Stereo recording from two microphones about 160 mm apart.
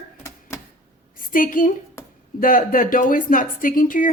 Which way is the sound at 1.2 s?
60° left (ahead or behind).